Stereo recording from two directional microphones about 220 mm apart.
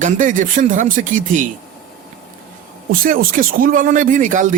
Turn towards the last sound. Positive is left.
turn(degrees=-35)  # may be behind; listen again after turning